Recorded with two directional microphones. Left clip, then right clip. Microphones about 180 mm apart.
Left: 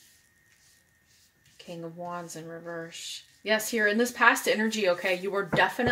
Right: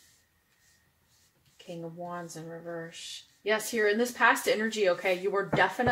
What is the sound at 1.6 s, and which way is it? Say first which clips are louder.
Speech: left 2 dB; 45° left (ahead or behind).